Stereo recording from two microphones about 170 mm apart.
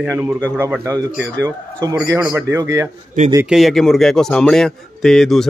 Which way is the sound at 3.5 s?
Centre (ahead or behind).